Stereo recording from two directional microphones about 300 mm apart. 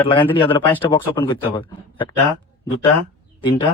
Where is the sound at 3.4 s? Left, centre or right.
Centre.